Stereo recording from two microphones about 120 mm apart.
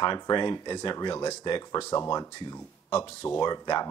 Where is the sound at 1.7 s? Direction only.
20° left (ahead or behind).